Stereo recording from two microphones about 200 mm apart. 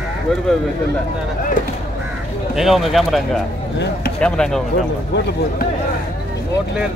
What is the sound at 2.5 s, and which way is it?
Speech, centre (ahead or behind).